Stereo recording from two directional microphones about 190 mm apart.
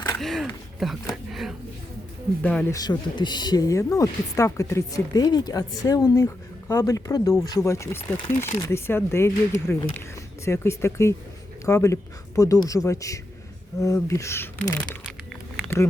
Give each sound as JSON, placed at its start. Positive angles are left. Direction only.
{"t": 0.2, "sound": "speech", "side_deg": 0}
{"t": 2.7, "sound": "speech", "side_deg": 20}